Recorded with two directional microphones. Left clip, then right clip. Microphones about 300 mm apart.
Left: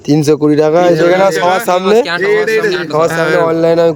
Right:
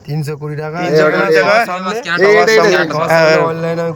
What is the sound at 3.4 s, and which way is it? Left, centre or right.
Speech, centre.